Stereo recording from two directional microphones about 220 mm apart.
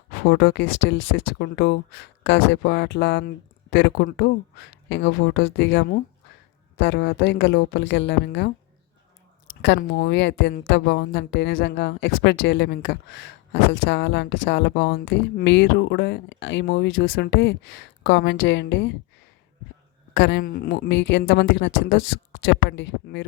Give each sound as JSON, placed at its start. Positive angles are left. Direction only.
{"t": 0.2, "sound": "speech", "side_deg": 45}
{"t": 9.6, "sound": "speech", "side_deg": 50}
{"t": 20.1, "sound": "speech", "side_deg": 55}